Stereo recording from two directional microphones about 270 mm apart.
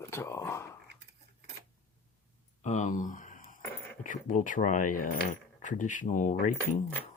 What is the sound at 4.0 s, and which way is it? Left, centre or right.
Speech, left.